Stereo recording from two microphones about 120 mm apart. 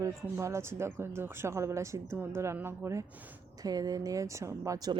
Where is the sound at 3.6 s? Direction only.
30° right (ahead or behind).